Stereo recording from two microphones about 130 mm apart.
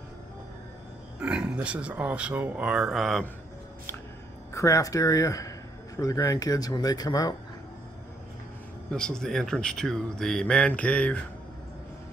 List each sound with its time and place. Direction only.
1.2 s speech: 5° right (ahead or behind)
4.6 s speech: 25° left (ahead or behind)
8.9 s speech: 5° left (ahead or behind)